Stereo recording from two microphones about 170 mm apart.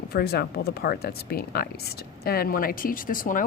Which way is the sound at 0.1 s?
65° left (ahead or behind).